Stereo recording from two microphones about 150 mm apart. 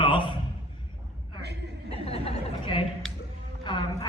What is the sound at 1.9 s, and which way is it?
A man's voice, 40° left (ahead or behind).